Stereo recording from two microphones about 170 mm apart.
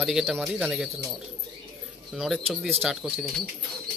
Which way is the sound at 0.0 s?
5° right (ahead or behind).